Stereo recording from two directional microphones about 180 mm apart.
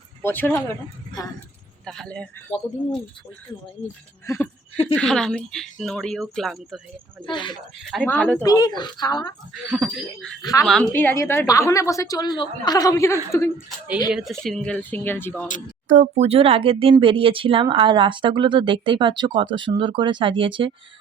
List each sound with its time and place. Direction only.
0.2 s speech: 10° left (ahead or behind)
1.8 s speech: 5° left (ahead or behind)
4.9 s speech: 5° left (ahead or behind)
7.3 s a woman's voice: 25° left (ahead or behind)
7.9 s a woman's voice: 5° left (ahead or behind)
8.4 s a woman's voice: 20° left (ahead or behind)
9.6 s speech: 5° right (ahead or behind)
10.4 s a woman's voice: 20° left (ahead or behind)
10.7 s a woman's voice: 5° left (ahead or behind)
13.7 s speech: 5° right (ahead or behind); by 15.4 s 10° left (ahead or behind)
15.9 s speech: 40° right (ahead or behind)